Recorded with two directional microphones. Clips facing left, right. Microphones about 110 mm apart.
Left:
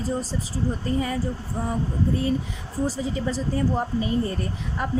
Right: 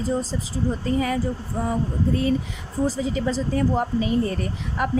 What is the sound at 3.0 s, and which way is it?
Speech, 90° right.